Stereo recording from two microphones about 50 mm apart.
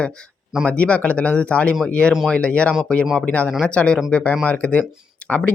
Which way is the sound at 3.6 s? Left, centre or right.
Left.